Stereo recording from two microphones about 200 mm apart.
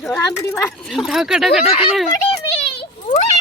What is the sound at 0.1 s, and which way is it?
Speech, 15° left (ahead or behind).